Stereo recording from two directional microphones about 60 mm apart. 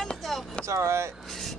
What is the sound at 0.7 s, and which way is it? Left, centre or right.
Speech, right.